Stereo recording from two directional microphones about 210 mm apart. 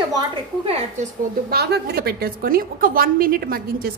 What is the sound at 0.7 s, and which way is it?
Speech, 30° right (ahead or behind).